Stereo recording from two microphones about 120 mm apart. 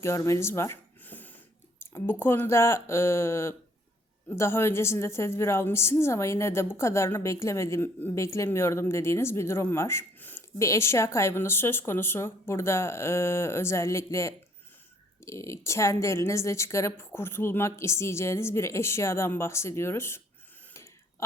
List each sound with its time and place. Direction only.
0.0 s a woman's voice: 25° left (ahead or behind)